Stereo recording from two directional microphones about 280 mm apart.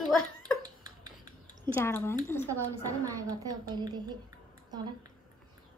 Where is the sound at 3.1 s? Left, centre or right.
Centre.